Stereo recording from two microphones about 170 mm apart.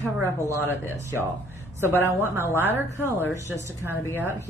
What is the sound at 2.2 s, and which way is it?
A woman's voice, 15° right (ahead or behind).